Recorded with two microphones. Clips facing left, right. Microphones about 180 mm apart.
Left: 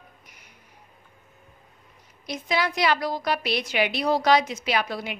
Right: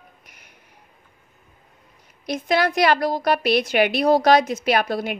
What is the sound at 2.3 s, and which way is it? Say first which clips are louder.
A woman's voice: right 6 dB; 55° right (ahead or behind).